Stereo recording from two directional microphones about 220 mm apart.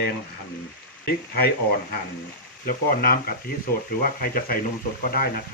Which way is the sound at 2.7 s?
40° left (ahead or behind).